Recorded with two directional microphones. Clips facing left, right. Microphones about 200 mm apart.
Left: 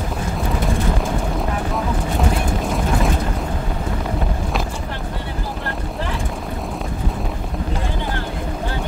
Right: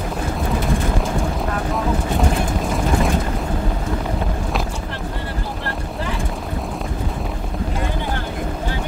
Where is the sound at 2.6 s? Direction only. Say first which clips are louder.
Right 1 dB; centre (ahead or behind).